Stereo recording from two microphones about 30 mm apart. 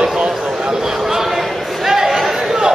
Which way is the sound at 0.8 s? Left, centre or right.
Centre.